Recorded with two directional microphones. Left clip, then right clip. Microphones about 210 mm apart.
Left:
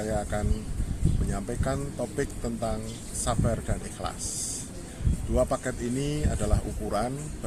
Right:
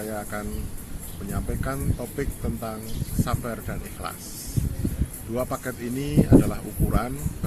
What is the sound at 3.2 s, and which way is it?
Speech, 20° left (ahead or behind).